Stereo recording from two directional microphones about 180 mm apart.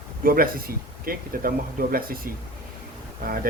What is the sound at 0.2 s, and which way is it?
Speech, 50° right (ahead or behind).